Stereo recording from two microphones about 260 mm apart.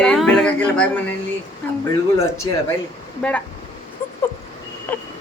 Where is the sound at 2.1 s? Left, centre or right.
Centre.